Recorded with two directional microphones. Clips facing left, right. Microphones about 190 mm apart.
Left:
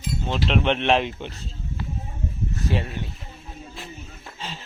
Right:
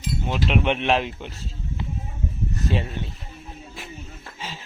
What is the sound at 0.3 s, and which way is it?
Speech, 5° right (ahead or behind).